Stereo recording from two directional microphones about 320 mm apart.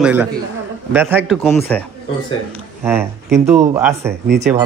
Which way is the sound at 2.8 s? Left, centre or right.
Centre.